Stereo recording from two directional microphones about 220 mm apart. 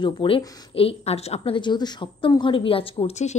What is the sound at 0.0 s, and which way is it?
A woman's voice, 20° left (ahead or behind).